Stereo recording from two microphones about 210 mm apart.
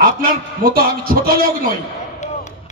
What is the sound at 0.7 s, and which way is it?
Speech, 45° right (ahead or behind).